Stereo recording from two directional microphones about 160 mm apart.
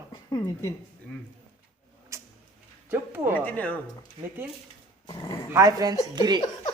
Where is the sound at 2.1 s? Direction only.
20° right (ahead or behind).